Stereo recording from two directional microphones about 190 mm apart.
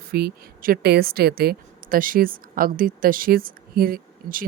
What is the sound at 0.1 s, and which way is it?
A woman's voice, 55° right (ahead or behind).